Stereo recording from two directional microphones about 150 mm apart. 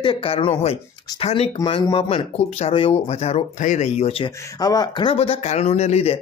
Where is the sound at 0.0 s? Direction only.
35° left (ahead or behind).